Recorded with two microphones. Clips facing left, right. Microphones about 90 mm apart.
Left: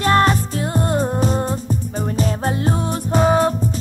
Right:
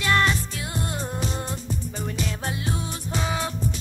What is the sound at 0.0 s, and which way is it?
Music, 45° left (ahead or behind).